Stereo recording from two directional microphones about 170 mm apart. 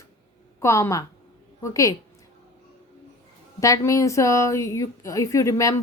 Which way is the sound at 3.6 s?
20° left (ahead or behind).